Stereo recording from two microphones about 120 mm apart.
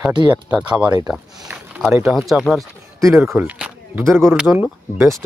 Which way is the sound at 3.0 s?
25° right (ahead or behind).